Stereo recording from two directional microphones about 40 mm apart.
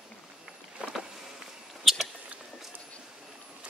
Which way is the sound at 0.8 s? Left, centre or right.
Right.